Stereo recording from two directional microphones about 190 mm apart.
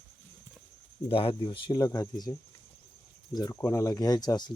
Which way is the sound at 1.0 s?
30° left (ahead or behind).